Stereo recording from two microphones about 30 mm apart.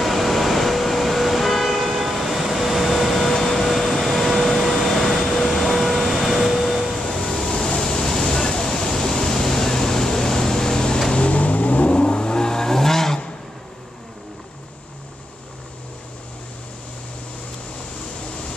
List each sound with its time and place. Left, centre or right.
0.0 s vehicle: centre
2.0 s train: centre
3.5 s vacuum cleaner: centre
5.2 s a sound: centre
5.6 s vehicle: centre
7.1 s vehicle: centre
7.8 s a sound: centre
11.1 s vehicle: left
11.9 s vehicle: left; by 13.2 s centre